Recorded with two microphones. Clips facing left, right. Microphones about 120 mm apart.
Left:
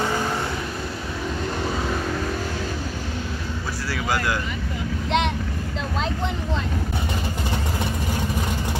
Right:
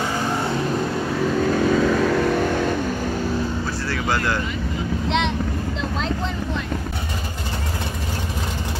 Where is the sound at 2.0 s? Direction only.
75° right (ahead or behind).